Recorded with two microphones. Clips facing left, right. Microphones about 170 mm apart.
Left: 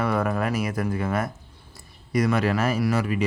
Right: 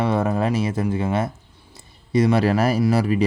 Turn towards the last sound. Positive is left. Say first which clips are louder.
# right 5 dB
turn(degrees=-35)  # may be behind; listen again after turning